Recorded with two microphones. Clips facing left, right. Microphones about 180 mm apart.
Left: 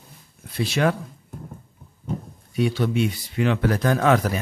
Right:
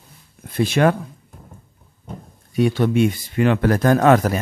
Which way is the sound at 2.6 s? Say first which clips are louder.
Right 5 dB; 50° right (ahead or behind).